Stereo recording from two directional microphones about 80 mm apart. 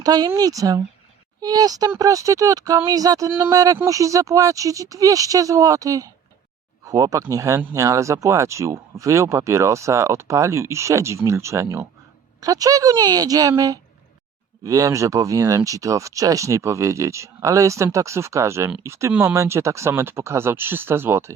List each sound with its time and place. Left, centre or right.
0.0 s speech: right
12.4 s speech: right